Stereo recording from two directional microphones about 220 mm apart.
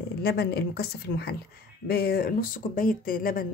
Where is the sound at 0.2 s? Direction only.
45° left (ahead or behind).